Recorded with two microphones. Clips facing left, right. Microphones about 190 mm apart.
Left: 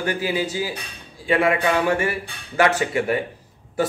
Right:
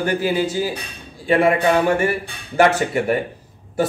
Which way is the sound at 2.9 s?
55° right (ahead or behind).